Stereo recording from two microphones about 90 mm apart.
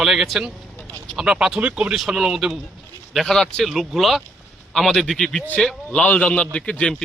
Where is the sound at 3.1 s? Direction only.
5° left (ahead or behind).